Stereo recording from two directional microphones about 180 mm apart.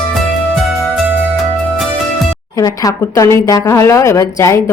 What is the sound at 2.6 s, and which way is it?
A woman's voice, 20° left (ahead or behind).